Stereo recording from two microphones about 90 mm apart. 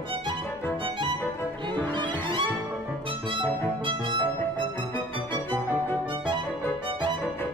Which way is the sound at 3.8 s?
65° right (ahead or behind).